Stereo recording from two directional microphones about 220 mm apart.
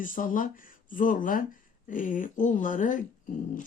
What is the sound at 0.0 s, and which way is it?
Speech, 40° left (ahead or behind).